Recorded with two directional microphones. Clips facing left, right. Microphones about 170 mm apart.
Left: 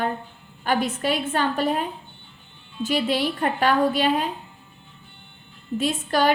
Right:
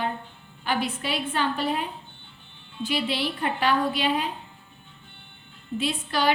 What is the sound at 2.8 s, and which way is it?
A woman's voice, 45° left (ahead or behind).